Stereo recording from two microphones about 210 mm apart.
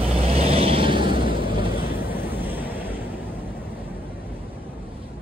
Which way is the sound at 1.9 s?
10° right (ahead or behind).